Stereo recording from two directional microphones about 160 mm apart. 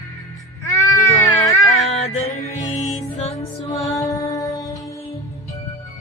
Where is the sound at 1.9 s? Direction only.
40° left (ahead or behind).